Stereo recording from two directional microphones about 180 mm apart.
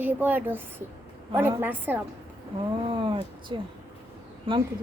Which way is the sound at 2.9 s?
25° right (ahead or behind).